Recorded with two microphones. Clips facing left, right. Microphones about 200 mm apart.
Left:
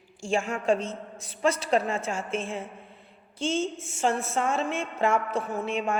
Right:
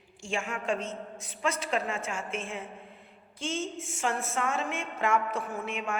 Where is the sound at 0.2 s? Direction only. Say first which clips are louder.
Left 6 dB; 35° left (ahead or behind).